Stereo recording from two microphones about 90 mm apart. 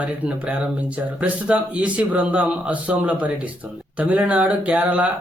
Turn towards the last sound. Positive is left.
turn(degrees=-15)  # may be behind; listen again after turning